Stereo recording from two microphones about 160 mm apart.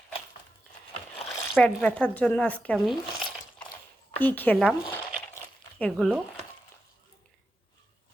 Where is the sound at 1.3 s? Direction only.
15° left (ahead or behind).